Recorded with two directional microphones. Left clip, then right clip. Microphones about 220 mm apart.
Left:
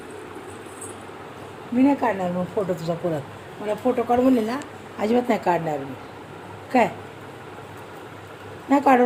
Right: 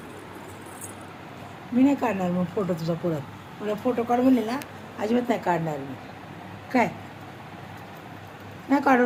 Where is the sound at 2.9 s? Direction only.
20° left (ahead or behind).